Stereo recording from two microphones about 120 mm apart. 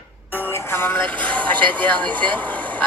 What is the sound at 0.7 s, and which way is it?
Speech, 20° left (ahead or behind).